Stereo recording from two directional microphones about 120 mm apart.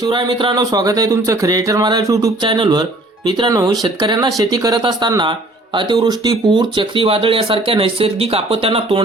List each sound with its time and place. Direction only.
0.0 s speech: 40° right (ahead or behind)
2.4 s speech: 45° right (ahead or behind)
3.5 s speech: 30° right (ahead or behind); by 9.0 s 50° right (ahead or behind)